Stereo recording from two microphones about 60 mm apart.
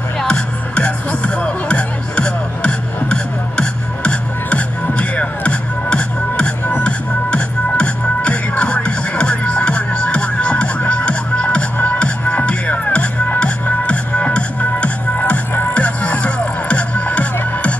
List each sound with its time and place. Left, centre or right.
0.3 s music: left